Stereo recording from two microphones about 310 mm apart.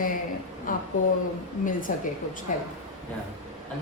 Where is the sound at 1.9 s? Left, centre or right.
Left.